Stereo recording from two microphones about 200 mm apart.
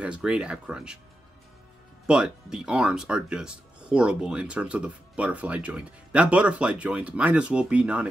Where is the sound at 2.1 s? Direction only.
5° right (ahead or behind).